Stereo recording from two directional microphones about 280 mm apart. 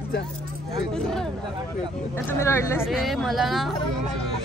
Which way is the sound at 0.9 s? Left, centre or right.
Centre.